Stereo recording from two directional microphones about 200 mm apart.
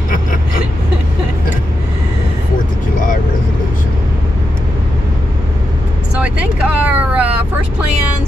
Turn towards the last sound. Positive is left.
turn(degrees=-5)  # may be behind; listen again after turning